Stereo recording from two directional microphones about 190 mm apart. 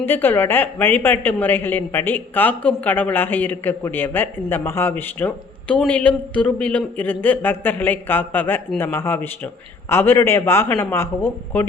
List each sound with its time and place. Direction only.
0.0 s a woman's voice: 10° left (ahead or behind)